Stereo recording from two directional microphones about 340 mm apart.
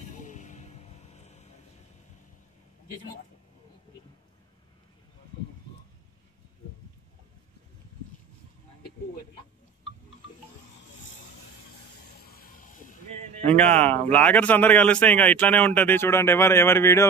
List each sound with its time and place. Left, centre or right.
0.2 s music: left
12.2 s music: left
13.5 s a man's voice: centre